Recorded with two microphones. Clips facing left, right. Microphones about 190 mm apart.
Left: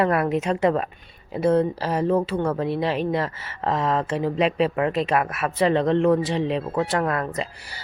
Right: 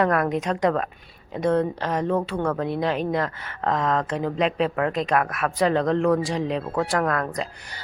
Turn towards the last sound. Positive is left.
turn(degrees=5)  # may be behind; listen again after turning